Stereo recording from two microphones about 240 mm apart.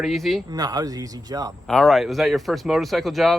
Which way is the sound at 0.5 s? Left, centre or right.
Centre.